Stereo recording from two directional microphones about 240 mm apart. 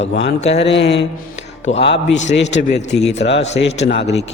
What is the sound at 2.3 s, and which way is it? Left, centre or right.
Speech, left.